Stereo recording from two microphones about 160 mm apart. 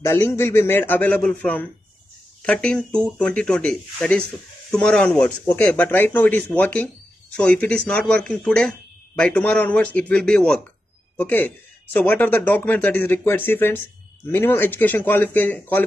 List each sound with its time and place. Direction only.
0.0 s speech: 15° left (ahead or behind)